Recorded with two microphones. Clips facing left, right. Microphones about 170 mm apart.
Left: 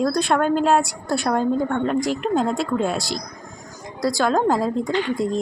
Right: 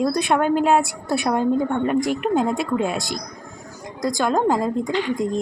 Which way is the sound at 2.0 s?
55° right (ahead or behind).